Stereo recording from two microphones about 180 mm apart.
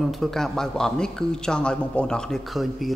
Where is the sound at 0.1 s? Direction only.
Centre (ahead or behind).